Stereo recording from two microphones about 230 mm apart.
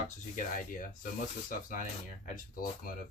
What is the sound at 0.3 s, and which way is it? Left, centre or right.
Speech, left.